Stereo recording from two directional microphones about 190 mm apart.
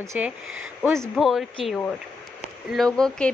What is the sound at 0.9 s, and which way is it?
Speech, centre (ahead or behind).